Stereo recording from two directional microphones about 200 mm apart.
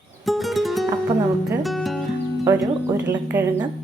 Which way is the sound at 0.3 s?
Centre (ahead or behind).